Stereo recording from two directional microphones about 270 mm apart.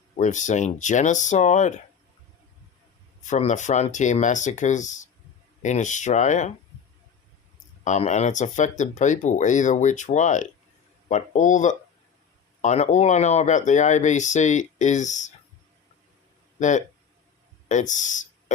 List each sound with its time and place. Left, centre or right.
0.2 s speech: left
3.2 s speech: left
7.9 s speech: left
16.6 s speech: left